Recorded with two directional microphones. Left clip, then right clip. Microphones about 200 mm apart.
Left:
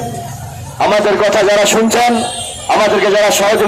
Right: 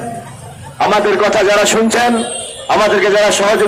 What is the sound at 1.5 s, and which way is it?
A man's voice, 35° left (ahead or behind).